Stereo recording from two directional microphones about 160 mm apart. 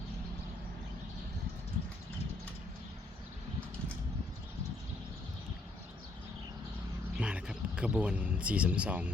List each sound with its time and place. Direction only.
7.2 s speech: 5° right (ahead or behind)